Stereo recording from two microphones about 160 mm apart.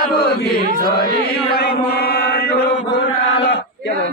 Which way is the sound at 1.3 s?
75° left (ahead or behind).